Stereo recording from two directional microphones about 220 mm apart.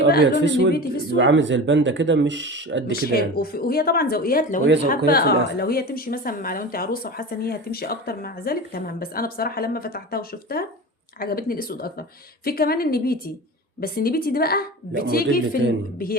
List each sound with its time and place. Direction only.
0.4 s a woman's voice: 55° right (ahead or behind)
0.7 s speech: 45° left (ahead or behind)
1.1 s speech: 55° right (ahead or behind)
2.9 s speech: 45° left (ahead or behind)
4.6 s a woman's voice: 50° right (ahead or behind)
5.0 s speech: 45° left (ahead or behind)